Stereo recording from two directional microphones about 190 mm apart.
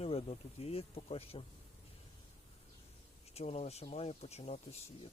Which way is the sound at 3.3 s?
35° left (ahead or behind).